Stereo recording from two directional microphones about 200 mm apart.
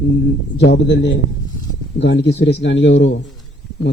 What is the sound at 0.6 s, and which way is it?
A man's voice, 60° left (ahead or behind).